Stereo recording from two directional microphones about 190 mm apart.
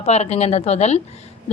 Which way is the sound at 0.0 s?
35° left (ahead or behind).